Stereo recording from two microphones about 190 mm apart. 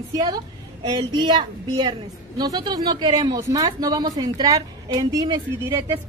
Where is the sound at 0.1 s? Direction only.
20° right (ahead or behind).